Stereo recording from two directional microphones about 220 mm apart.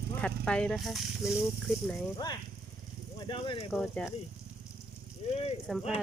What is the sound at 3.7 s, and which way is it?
Speech, 5° left (ahead or behind).